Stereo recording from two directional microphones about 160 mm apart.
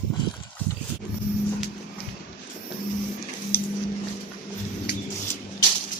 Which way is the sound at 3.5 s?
70° left (ahead or behind).